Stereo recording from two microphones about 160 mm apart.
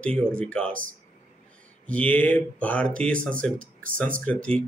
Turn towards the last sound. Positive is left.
turn(degrees=5)  # may be behind; listen again after turning